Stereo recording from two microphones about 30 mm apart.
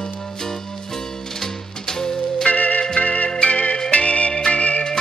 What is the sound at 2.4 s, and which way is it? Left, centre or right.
Music, left.